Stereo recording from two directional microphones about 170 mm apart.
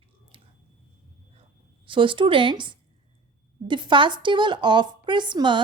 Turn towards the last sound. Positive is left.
turn(degrees=-25)  # may be behind; listen again after turning